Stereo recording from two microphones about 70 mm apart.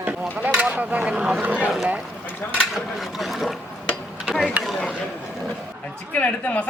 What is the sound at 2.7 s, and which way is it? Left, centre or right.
Speech, centre.